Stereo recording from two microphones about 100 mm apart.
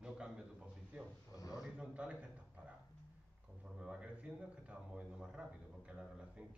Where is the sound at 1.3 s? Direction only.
40° left (ahead or behind).